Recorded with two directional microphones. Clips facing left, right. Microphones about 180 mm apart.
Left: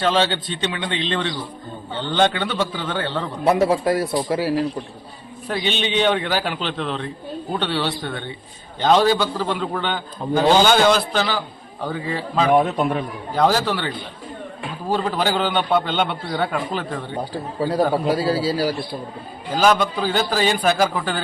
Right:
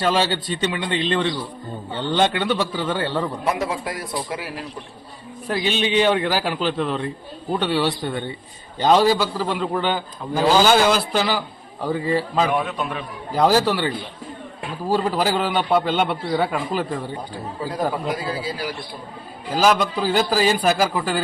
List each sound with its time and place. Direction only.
0.0 s a man's voice: 5° right (ahead or behind)
3.4 s a man's voice: 30° left (ahead or behind)
5.5 s a man's voice: 5° right (ahead or behind)
12.5 s a man's voice: 45° left (ahead or behind)
13.3 s a man's voice: 5° right (ahead or behind)
17.9 s a man's voice: 35° left (ahead or behind)
19.5 s a man's voice: 5° right (ahead or behind)